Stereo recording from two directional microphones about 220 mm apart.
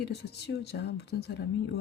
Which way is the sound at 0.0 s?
50° left (ahead or behind).